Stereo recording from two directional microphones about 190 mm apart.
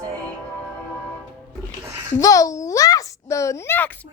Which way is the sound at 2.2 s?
20° left (ahead or behind).